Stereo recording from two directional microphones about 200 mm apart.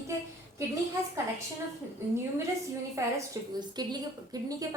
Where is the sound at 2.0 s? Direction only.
10° right (ahead or behind).